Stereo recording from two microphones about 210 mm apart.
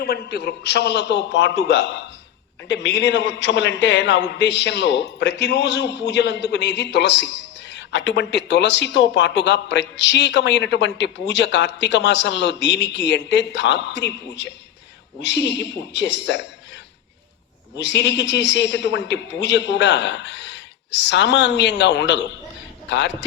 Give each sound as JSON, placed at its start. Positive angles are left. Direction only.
{"t": 0.0, "sound": "speech", "side_deg": 50}
{"t": 17.7, "sound": "speech", "side_deg": 55}